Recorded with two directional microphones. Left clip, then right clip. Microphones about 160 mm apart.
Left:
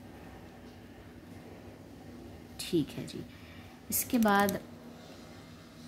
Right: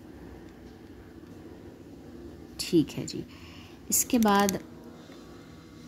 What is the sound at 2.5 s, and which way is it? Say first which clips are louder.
Speech: right 7 dB; 20° right (ahead or behind).